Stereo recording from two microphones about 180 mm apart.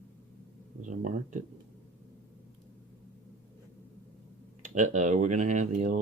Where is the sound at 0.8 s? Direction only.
45° right (ahead or behind).